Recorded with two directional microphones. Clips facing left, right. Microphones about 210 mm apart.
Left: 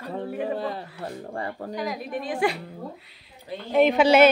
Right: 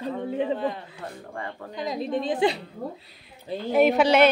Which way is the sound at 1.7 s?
25° right (ahead or behind).